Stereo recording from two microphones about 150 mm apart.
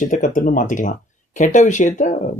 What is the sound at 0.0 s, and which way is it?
A man's voice, 60° left (ahead or behind).